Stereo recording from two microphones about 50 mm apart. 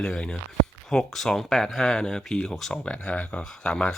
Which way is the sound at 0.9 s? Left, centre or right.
Centre.